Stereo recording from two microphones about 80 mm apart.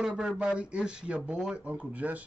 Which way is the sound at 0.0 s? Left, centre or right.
Centre.